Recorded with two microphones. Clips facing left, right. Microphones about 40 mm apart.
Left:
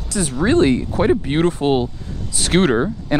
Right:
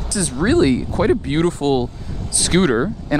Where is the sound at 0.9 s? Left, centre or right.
Centre.